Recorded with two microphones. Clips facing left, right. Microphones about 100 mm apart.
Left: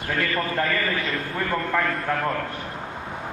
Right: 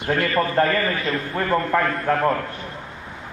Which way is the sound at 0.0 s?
25° right (ahead or behind).